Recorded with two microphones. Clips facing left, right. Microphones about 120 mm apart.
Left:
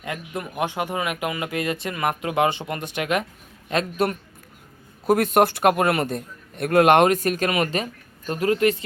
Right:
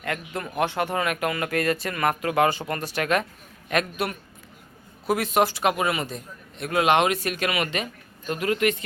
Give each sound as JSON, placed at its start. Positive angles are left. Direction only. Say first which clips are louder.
{"t": 0.0, "sound": "a man's voice", "louder": "even", "side_deg": 15}
{"t": 5.0, "sound": "a man's voice", "louder": "left 4 dB", "side_deg": 50}